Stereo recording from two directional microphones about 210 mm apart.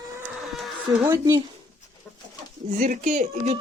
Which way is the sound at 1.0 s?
10° right (ahead or behind).